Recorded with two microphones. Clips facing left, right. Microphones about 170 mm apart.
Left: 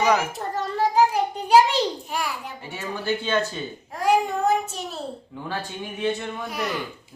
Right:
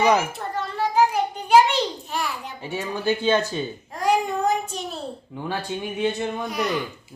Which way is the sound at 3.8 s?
5° left (ahead or behind).